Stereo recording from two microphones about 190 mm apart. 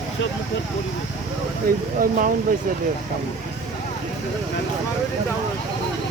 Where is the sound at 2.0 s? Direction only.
45° right (ahead or behind).